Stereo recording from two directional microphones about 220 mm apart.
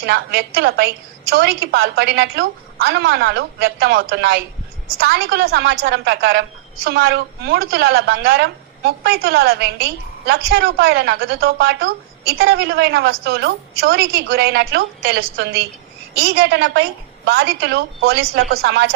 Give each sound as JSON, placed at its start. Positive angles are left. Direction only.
{"t": 0.0, "sound": "a woman's voice", "side_deg": -50}